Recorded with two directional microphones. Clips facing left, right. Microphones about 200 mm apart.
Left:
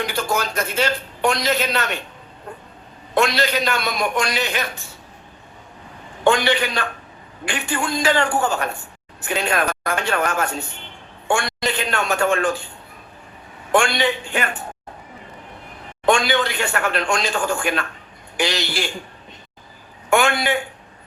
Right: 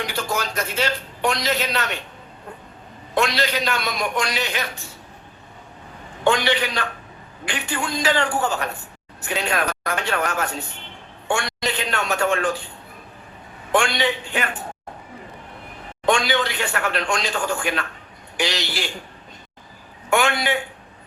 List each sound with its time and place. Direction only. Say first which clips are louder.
0.0 s a man's voice: left 3 dB; 45° left (ahead or behind)
3.2 s a man's voice: left 3 dB; 50° left (ahead or behind)
6.2 s a man's voice: left 2 dB; 50° left (ahead or behind)
13.7 s a man's voice: left 2 dB; 50° left (ahead or behind)
16.0 s a man's voice: left 2 dB; 50° left (ahead or behind)
20.1 s a man's voice: left 2 dB; 50° left (ahead or behind)